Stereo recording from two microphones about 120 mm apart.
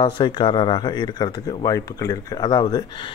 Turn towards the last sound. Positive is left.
turn(degrees=40)  # may be behind; listen again after turning